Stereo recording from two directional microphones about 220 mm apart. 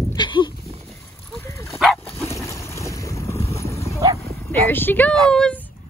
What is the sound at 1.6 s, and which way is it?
Dog, centre (ahead or behind).